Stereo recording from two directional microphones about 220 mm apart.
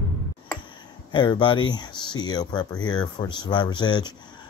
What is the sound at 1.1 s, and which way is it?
Speech, 20° left (ahead or behind).